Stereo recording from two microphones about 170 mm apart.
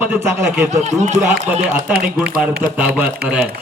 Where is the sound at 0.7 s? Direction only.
45° right (ahead or behind).